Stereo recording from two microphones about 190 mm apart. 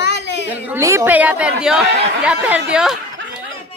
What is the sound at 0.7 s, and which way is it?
A woman's voice, 15° right (ahead or behind).